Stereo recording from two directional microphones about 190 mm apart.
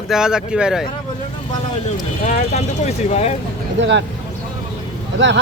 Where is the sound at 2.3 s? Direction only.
40° left (ahead or behind).